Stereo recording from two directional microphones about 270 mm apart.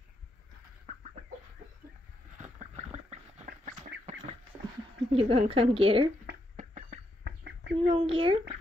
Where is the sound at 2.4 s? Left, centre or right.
Right.